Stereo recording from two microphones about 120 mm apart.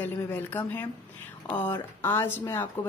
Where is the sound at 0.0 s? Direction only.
15° left (ahead or behind).